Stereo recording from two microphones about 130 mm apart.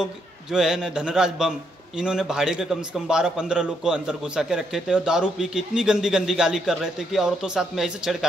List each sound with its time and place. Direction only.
0.0 s a man's voice: 5° right (ahead or behind)